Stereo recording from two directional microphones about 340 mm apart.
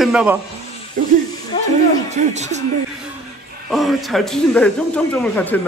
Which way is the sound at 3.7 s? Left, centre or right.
Centre.